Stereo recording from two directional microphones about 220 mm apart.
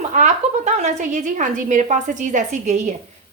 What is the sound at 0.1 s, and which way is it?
A woman's voice, 30° right (ahead or behind).